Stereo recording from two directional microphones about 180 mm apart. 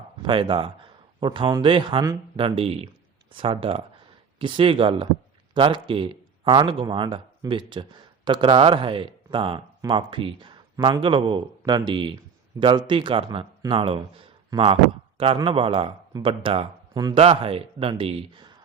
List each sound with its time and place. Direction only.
0.2 s a man's voice: 30° right (ahead or behind)